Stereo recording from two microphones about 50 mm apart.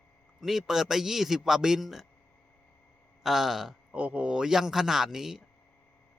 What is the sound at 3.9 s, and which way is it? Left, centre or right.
A man's voice, right.